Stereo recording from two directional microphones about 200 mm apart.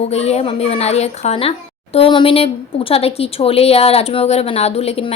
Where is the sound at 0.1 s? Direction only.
30° left (ahead or behind).